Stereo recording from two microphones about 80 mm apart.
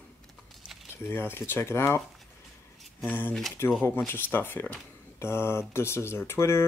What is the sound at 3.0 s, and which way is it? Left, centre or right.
Speech, left.